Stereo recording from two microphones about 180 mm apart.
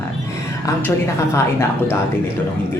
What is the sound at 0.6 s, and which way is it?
Speech, 15° left (ahead or behind).